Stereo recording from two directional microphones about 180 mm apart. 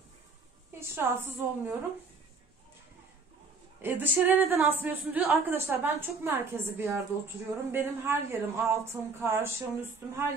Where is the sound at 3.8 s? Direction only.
10° right (ahead or behind).